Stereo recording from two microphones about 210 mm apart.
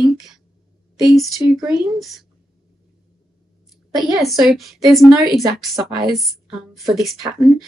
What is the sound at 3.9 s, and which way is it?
Speech, centre (ahead or behind).